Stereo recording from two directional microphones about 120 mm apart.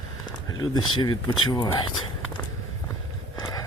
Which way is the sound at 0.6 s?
35° left (ahead or behind).